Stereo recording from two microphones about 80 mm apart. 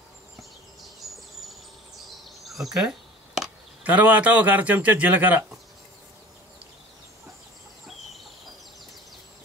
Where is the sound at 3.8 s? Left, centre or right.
Centre.